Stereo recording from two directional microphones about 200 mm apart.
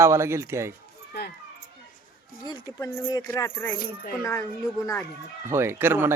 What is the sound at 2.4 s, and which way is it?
Speech, 15° left (ahead or behind).